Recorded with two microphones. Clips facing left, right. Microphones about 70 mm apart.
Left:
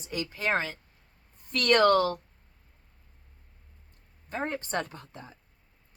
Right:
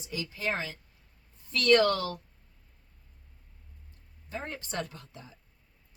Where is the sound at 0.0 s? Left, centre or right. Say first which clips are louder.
Left 3 dB; left.